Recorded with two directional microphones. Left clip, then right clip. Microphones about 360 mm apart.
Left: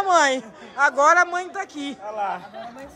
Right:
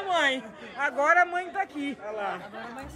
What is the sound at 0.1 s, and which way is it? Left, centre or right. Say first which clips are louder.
Speech: left 7 dB; left.